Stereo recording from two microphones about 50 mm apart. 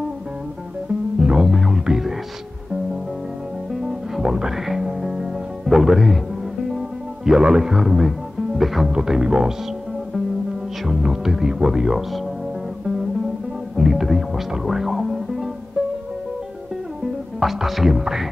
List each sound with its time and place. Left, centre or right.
1.2 s music: centre
1.5 s music: centre
3.7 s music: centre
7.2 s speech: centre
10.9 s speech: centre
13.7 s music: centre
17.4 s speech: centre